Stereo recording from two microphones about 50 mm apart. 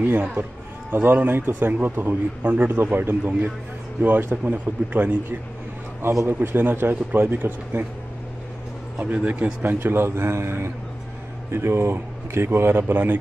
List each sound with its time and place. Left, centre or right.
0.0 s speech: right
2.7 s speech: right
3.3 s speech: right
6.2 s speech: right
8.9 s speech: right